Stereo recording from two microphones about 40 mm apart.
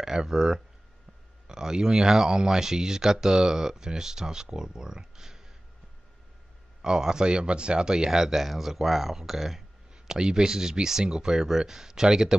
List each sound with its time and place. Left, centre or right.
0.0 s speech: centre
6.8 s speech: centre
9.1 s a sound: centre
10.1 s speech: centre